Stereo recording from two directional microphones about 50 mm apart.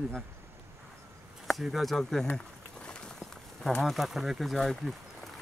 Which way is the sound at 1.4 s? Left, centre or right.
Centre.